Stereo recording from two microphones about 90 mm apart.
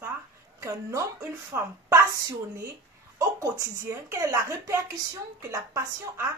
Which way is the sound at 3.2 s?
40° right (ahead or behind).